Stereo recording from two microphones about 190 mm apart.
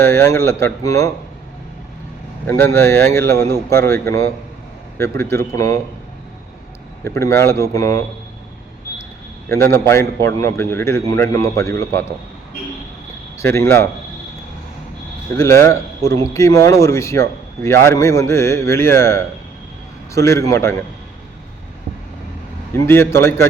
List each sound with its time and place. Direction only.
0.0 s a man's voice: 15° left (ahead or behind)
2.5 s a man's voice: 15° left (ahead or behind)
7.0 s a man's voice: 15° left (ahead or behind)
9.5 s a man's voice: 15° left (ahead or behind)
13.4 s a man's voice: 15° left (ahead or behind)
15.4 s a man's voice: 15° left (ahead or behind)
22.9 s a man's voice: 15° left (ahead or behind)